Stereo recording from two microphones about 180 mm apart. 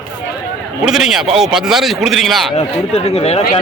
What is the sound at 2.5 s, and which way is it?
Speech, 35° left (ahead or behind).